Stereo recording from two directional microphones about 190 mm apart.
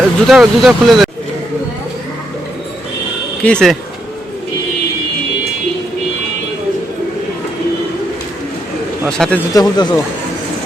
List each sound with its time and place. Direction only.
0.3 s speech: 5° right (ahead or behind)
3.4 s speech: 5° left (ahead or behind)
9.0 s speech: 5° left (ahead or behind)
9.6 s speech: 20° left (ahead or behind)